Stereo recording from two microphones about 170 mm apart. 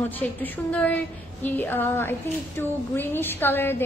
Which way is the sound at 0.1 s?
10° left (ahead or behind).